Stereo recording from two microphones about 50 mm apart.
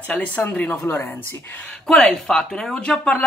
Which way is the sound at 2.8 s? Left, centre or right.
Left.